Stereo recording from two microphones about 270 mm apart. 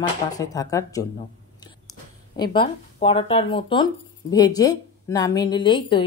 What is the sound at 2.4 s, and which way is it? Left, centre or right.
A woman's voice, centre.